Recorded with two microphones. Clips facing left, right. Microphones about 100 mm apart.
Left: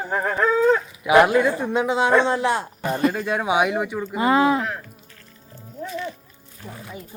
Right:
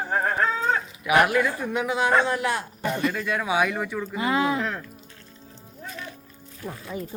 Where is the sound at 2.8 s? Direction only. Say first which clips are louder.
Left 3 dB; 35° left (ahead or behind); by 4.2 s 15° left (ahead or behind).